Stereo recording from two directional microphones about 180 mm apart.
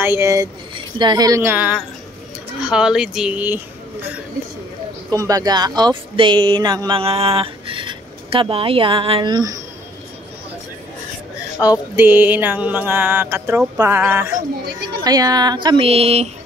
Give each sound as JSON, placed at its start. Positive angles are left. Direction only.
{"t": 0.0, "sound": "speech", "side_deg": -15}
{"t": 11.5, "sound": "a sound", "side_deg": 20}
{"t": 11.9, "sound": "speech", "side_deg": -10}